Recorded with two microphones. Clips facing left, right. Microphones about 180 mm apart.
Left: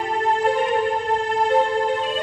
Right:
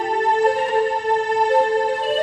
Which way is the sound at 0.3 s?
40° right (ahead or behind).